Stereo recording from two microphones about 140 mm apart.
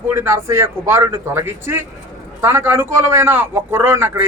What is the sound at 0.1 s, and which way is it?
A man's voice, 20° right (ahead or behind).